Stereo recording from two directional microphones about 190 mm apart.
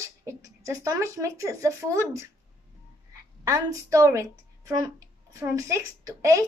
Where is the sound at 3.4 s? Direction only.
15° right (ahead or behind).